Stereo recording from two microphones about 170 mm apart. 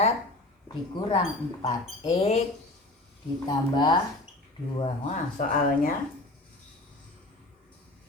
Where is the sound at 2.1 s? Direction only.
40° left (ahead or behind).